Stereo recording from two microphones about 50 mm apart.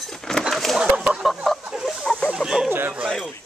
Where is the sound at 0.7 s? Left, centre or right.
Centre.